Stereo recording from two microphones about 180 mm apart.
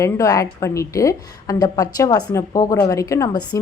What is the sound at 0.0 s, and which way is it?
A woman's voice, 20° left (ahead or behind).